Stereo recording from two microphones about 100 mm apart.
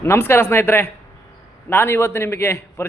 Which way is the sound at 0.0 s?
25° left (ahead or behind).